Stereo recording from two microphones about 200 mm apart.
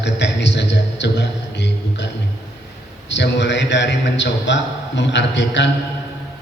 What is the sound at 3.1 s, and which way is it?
A man's voice, 60° left (ahead or behind).